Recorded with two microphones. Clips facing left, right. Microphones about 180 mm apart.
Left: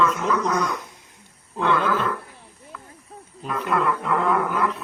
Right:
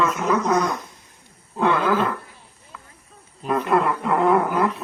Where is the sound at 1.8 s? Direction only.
35° right (ahead or behind).